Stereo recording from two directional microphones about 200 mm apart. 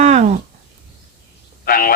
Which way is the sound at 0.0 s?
35° right (ahead or behind).